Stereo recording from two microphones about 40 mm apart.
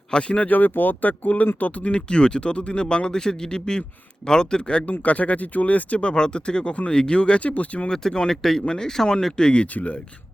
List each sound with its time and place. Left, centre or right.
0.1 s a man's voice: left
0.4 s speech: left
2.0 s a man's voice: left
4.9 s a man's voice: left
7.9 s speech: centre
9.4 s a man's voice: left